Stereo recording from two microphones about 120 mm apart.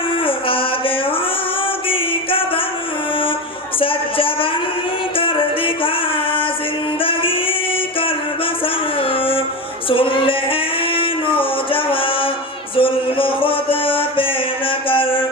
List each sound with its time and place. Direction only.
0.3 s mantra: 50° left (ahead or behind)
3.8 s music: 50° left (ahead or behind)
7.0 s music: 50° left (ahead or behind)
9.0 s a sound: 50° left (ahead or behind)
9.9 s music: 45° left (ahead or behind)
14.8 s mantra: 50° left (ahead or behind)